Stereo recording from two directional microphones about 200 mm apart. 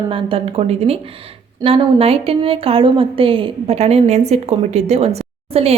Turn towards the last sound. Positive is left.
turn(degrees=-30)  # may be behind; listen again after turning